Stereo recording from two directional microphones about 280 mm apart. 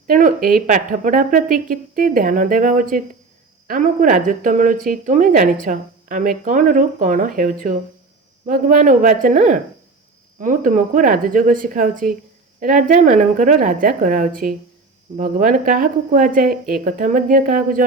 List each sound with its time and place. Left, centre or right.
0.1 s a woman's voice: right